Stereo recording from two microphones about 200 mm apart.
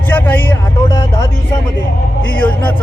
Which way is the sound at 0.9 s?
20° left (ahead or behind).